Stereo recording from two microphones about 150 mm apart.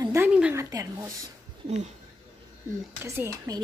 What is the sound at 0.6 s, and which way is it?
Speech, 20° right (ahead or behind).